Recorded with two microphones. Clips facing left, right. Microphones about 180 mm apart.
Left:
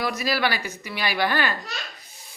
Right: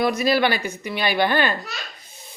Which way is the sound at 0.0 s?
25° right (ahead or behind).